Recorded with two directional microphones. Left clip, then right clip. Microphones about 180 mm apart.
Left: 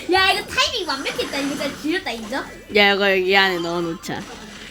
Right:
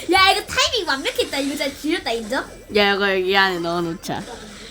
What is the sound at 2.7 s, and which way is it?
Speech, 5° left (ahead or behind).